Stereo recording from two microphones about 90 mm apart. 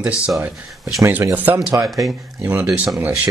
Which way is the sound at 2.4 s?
20° right (ahead or behind).